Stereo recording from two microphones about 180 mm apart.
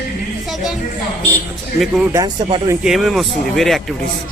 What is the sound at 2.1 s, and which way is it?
Speech, 20° right (ahead or behind).